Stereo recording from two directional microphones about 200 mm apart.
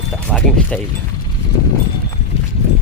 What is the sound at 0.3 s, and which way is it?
Speech, 5° left (ahead or behind).